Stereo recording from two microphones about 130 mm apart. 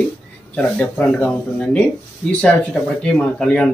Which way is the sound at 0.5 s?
15° left (ahead or behind).